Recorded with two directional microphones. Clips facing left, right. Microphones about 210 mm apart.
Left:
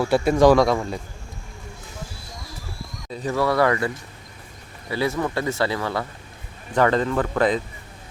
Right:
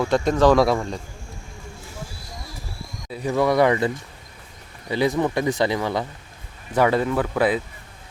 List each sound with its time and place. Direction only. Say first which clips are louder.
0.0 s speech: left 1 dB; 5° left (ahead or behind)
0.5 s a man's voice: even; centre (ahead or behind)
3.1 s speech: right 2 dB; 10° right (ahead or behind)